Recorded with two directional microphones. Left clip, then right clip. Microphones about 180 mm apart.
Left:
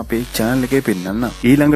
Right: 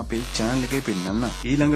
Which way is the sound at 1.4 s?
40° left (ahead or behind).